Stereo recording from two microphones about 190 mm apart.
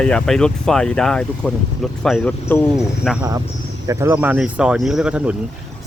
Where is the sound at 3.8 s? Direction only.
10° right (ahead or behind).